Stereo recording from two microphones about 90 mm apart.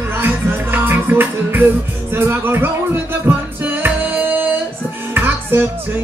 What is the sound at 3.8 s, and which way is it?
Music, 20° right (ahead or behind).